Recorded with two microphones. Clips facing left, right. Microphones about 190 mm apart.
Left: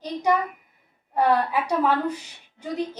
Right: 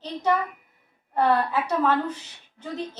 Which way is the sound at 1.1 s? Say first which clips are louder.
Left 1 dB; 10° left (ahead or behind).